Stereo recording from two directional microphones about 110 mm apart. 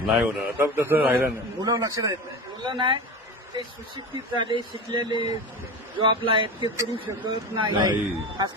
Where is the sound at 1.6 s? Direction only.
35° right (ahead or behind).